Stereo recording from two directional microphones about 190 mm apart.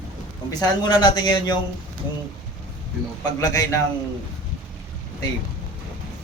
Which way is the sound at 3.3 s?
20° left (ahead or behind).